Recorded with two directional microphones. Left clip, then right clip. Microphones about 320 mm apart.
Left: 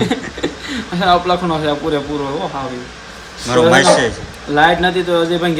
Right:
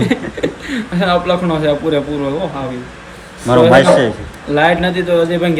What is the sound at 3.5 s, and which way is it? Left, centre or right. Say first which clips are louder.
A man's voice: right 2 dB; centre.